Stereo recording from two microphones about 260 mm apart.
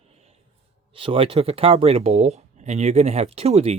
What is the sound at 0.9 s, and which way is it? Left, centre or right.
Speech, right.